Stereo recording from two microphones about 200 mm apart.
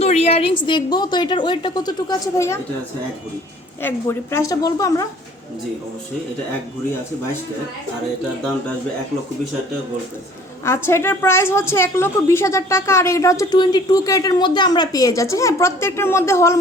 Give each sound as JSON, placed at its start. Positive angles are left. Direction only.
{"t": 0.0, "sound": "a woman's voice", "side_deg": 30}
{"t": 3.8, "sound": "a woman's voice", "side_deg": 10}
{"t": 10.7, "sound": "a woman's voice", "side_deg": 15}